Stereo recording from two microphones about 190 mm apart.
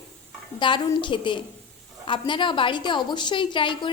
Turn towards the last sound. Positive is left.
turn(degrees=25)  # may be behind; listen again after turning